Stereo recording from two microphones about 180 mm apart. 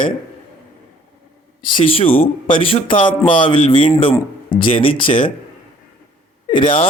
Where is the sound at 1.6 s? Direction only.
30° left (ahead or behind).